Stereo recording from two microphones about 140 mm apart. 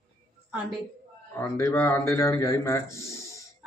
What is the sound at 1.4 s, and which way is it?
Speech, 20° left (ahead or behind).